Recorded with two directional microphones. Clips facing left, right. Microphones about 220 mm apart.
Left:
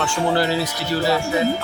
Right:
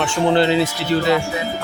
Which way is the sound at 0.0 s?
20° right (ahead or behind).